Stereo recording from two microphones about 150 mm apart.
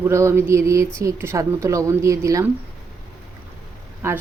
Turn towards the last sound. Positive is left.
turn(degrees=-15)  # may be behind; listen again after turning